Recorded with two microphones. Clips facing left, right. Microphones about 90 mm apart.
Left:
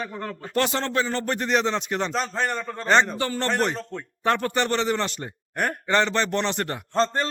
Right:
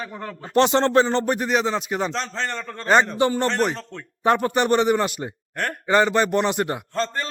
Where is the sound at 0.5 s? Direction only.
25° right (ahead or behind).